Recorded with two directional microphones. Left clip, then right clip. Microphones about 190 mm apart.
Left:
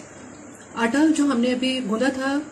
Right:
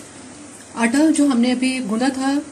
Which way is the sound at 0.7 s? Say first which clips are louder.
Right 3 dB; 20° right (ahead or behind).